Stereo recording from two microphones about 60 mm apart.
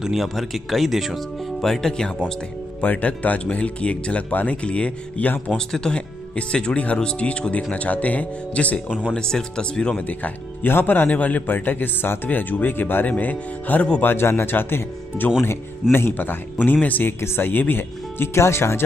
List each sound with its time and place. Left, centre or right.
0.0 s speech: centre
1.7 s speech: centre
2.8 s speech: left
10.0 s a man's voice: left
18.3 s speech: left